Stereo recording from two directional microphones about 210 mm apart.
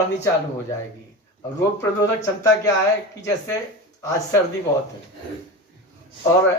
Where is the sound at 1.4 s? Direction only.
15° left (ahead or behind).